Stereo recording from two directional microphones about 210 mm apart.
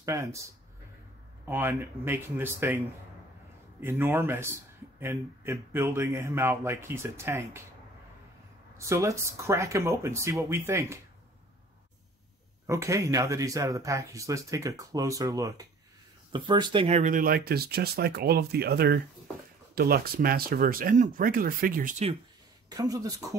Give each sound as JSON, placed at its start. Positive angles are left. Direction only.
{"t": 0.0, "sound": "speech", "side_deg": -15}
{"t": 1.5, "sound": "speech", "side_deg": -10}
{"t": 4.0, "sound": "speech", "side_deg": -10}
{"t": 8.7, "sound": "speech", "side_deg": -15}
{"t": 12.6, "sound": "speech", "side_deg": -15}
{"t": 22.7, "sound": "speech", "side_deg": -15}